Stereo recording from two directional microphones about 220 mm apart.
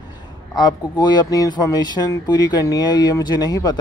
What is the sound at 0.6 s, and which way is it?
Speech, 20° left (ahead or behind).